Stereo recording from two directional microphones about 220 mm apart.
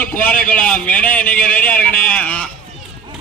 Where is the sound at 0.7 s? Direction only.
5° left (ahead or behind).